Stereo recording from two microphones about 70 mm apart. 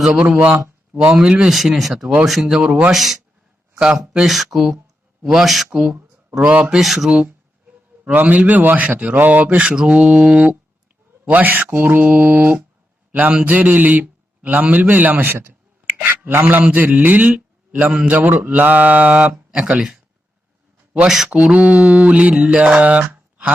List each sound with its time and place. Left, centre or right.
0.2 s a man's voice: right
1.1 s mantra: centre
1.5 s speech: centre
2.2 s mantra: centre
2.9 s speech: centre
3.8 s mantra: centre
5.2 s speech: centre
5.8 s speech: centre
6.7 s speech: centre
7.1 s a man's voice: centre
21.2 s mantra: centre